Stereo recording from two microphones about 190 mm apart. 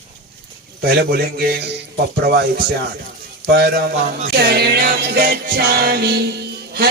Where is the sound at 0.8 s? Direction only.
55° right (ahead or behind).